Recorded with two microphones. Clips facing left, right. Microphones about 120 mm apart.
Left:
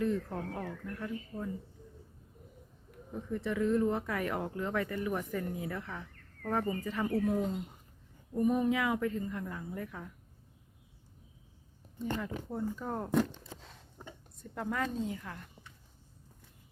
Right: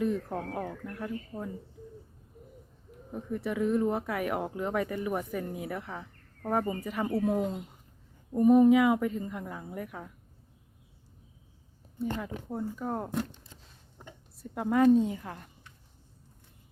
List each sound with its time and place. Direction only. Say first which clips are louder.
0.0 s a woman's voice: right 2 dB; 15° right (ahead or behind)
3.1 s speech: right 2 dB; 10° right (ahead or behind)
11.9 s speech: right 2 dB; 10° right (ahead or behind)
14.5 s a woman's voice: right 12 dB; 15° right (ahead or behind)